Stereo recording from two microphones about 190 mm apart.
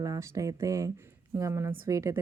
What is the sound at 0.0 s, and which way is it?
Speech, 15° right (ahead or behind).